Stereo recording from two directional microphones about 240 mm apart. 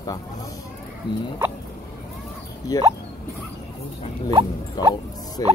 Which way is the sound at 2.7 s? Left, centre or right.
Centre.